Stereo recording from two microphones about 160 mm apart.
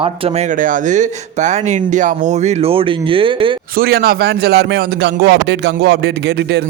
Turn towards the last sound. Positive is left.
turn(degrees=-90)